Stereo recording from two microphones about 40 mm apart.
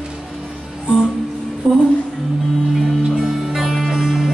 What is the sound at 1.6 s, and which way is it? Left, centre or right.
Music, right.